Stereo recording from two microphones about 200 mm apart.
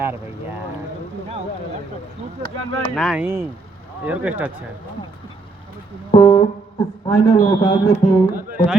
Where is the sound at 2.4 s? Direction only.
25° left (ahead or behind).